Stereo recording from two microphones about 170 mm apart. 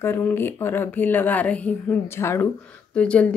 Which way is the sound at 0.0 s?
15° left (ahead or behind).